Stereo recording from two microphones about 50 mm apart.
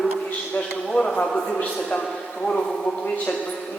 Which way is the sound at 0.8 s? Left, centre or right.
Centre.